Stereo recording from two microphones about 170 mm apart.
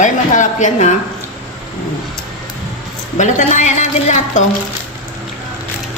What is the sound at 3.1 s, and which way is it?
A woman's voice, 45° left (ahead or behind).